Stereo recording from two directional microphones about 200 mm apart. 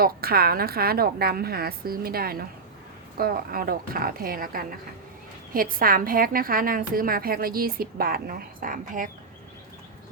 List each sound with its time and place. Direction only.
0.0 s a woman's voice: 50° right (ahead or behind)